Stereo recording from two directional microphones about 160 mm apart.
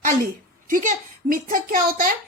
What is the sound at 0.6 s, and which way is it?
A child's voice, 55° right (ahead or behind).